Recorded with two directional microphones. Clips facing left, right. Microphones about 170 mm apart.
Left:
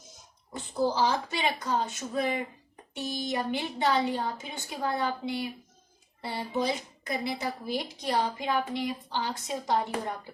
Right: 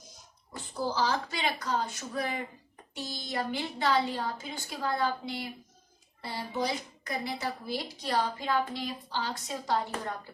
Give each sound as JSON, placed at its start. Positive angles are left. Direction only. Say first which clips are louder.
{"t": 0.5, "sound": "a woman's voice", "louder": "left 5 dB", "side_deg": 20}